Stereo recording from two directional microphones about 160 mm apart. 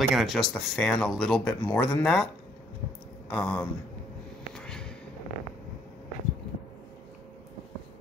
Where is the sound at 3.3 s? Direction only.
5° left (ahead or behind).